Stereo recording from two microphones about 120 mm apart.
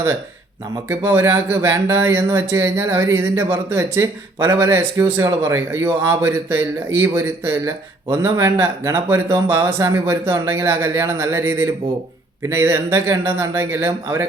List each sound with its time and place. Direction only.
0.9 s speech: 20° right (ahead or behind)